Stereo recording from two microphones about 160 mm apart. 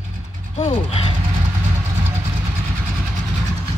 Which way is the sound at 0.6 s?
45° left (ahead or behind).